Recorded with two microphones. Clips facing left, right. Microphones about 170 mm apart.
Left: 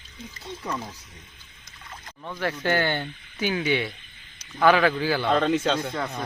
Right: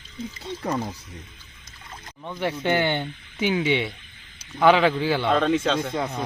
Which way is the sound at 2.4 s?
20° right (ahead or behind).